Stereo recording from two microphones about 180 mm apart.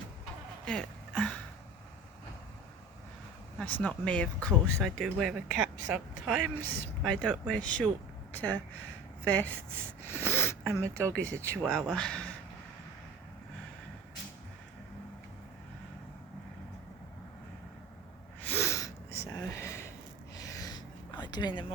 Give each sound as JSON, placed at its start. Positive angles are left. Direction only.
{"t": 0.6, "sound": "speech", "side_deg": 5}
{"t": 3.6, "sound": "speech", "side_deg": 10}
{"t": 10.1, "sound": "a sound", "side_deg": 10}
{"t": 11.1, "sound": "speech", "side_deg": 10}
{"t": 18.4, "sound": "gasp", "side_deg": 15}